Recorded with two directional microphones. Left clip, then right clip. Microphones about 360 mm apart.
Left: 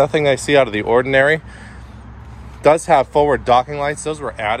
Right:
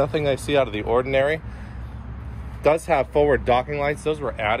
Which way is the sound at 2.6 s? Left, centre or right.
Centre.